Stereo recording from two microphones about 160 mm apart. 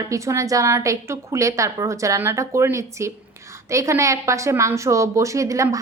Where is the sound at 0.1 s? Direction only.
20° right (ahead or behind).